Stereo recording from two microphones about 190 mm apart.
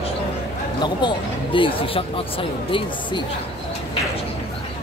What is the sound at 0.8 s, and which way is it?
Speech, 25° left (ahead or behind).